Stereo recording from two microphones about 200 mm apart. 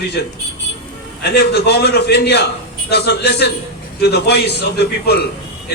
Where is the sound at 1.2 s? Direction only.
55° left (ahead or behind).